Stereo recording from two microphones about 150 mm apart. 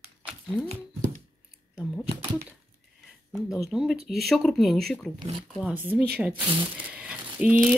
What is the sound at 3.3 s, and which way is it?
Speech, centre (ahead or behind).